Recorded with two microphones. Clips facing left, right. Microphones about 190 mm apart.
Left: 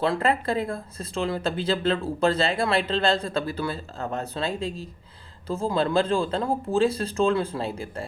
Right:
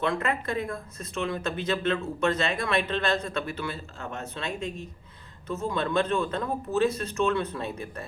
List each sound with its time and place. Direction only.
0.0 s speech: 30° left (ahead or behind)